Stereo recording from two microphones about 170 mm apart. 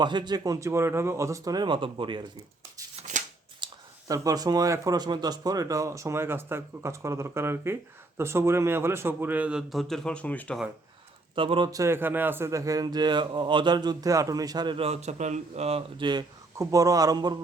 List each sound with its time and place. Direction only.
0.0 s a man's voice: 25° right (ahead or behind)
2.9 s shuffling cards: 45° right (ahead or behind)
3.6 s a sound: 25° right (ahead or behind)
4.1 s speech: 20° right (ahead or behind); by 10.6 s 10° left (ahead or behind)
11.3 s a man's voice: 30° right (ahead or behind)